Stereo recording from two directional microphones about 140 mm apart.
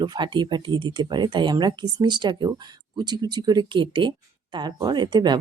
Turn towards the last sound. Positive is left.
turn(degrees=-30)  # may be behind; listen again after turning